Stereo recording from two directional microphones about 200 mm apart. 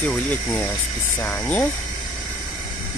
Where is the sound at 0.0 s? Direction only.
5° left (ahead or behind).